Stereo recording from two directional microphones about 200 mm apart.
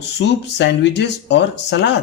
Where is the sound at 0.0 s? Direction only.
60° left (ahead or behind).